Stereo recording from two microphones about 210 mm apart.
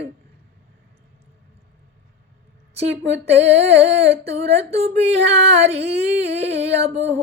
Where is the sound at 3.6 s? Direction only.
30° right (ahead or behind).